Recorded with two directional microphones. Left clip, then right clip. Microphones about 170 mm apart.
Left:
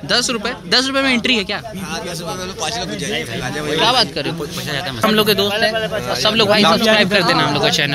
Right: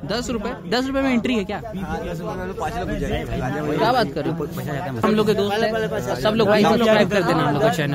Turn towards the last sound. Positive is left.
turn(degrees=-20)  # may be behind; listen again after turning